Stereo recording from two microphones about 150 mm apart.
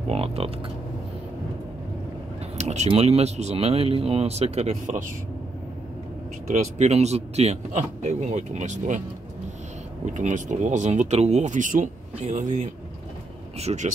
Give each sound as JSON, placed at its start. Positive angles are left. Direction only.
{"t": 0.1, "sound": "speech", "side_deg": -40}
{"t": 2.5, "sound": "vehicle", "side_deg": -50}
{"t": 2.9, "sound": "speech", "side_deg": -45}
{"t": 6.6, "sound": "speech", "side_deg": -50}
{"t": 10.0, "sound": "speech", "side_deg": -55}